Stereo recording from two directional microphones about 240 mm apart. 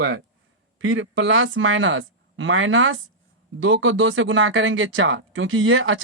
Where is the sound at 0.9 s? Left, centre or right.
Right.